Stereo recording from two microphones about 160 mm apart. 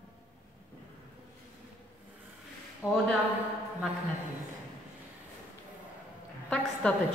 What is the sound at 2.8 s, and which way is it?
Music, 10° right (ahead or behind).